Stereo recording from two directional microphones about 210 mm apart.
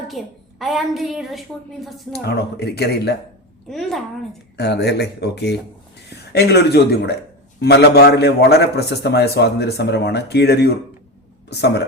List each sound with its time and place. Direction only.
0.2 s a woman's voice: centre (ahead or behind)
2.1 s a man's voice: 50° left (ahead or behind)
3.7 s a woman's voice: centre (ahead or behind)
4.5 s a man's voice: 50° left (ahead or behind)